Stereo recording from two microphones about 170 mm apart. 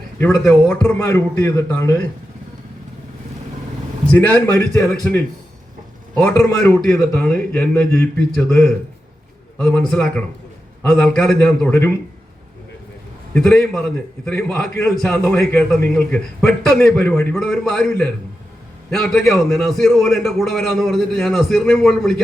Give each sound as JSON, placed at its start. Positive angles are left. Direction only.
{"t": 0.2, "sound": "a man's voice", "side_deg": 10}
{"t": 4.0, "sound": "a man's voice", "side_deg": 10}
{"t": 13.3, "sound": "a man's voice", "side_deg": 5}